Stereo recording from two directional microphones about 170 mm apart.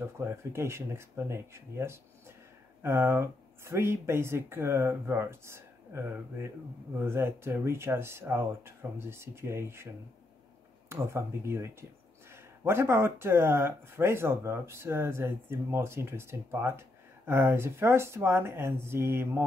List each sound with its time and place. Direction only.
0.2 s speech: 15° right (ahead or behind)
10.9 s speech: 15° right (ahead or behind)